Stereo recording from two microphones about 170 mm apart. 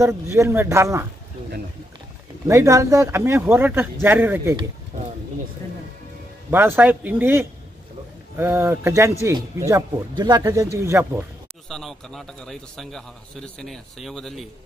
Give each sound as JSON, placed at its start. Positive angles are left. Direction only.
{"t": 0.0, "sound": "speech", "side_deg": -15}
{"t": 2.4, "sound": "speech", "side_deg": -15}
{"t": 6.5, "sound": "speech", "side_deg": -15}
{"t": 11.7, "sound": "a man's voice", "side_deg": 0}